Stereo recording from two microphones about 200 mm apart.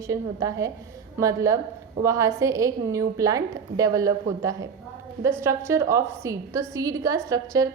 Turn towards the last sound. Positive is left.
turn(degrees=-15)  # may be behind; listen again after turning